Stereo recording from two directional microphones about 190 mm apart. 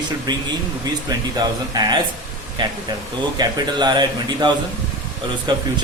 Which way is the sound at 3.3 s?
20° right (ahead or behind).